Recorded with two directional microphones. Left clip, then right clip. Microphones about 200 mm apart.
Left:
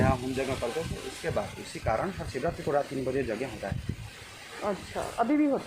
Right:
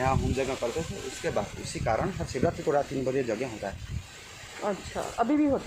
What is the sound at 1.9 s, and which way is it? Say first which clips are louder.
Speech: right 1 dB; 45° right (ahead or behind).